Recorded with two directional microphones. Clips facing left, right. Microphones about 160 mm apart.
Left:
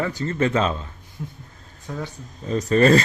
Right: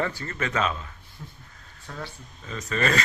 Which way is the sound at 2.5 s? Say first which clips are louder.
Left 10 dB; 35° left (ahead or behind).